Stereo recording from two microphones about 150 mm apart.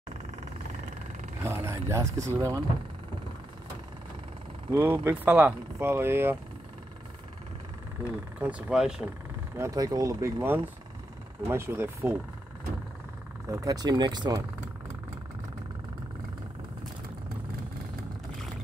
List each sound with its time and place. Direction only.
1.4 s speech: 15° right (ahead or behind)
4.6 s speech: 15° right (ahead or behind)
8.4 s speech: 10° right (ahead or behind)
9.6 s speech: 20° right (ahead or behind)
13.5 s speech: 25° right (ahead or behind)